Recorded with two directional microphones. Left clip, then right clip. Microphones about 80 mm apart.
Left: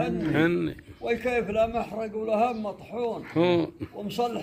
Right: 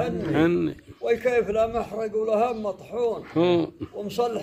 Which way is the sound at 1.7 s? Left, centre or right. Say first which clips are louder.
Right 3 dB; right.